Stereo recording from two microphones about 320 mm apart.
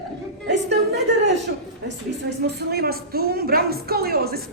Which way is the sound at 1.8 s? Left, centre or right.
Right.